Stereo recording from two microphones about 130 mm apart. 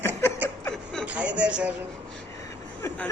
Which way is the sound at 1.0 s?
10° right (ahead or behind).